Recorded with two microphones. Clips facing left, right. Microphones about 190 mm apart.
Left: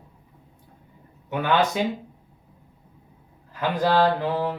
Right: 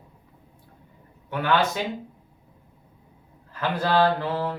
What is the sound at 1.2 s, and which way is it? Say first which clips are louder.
Speech: left 1 dB; 20° left (ahead or behind).